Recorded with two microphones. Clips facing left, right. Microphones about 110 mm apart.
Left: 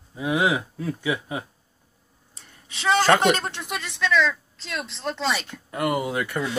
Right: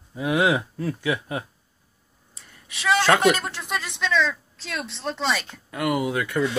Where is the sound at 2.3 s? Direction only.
30° left (ahead or behind).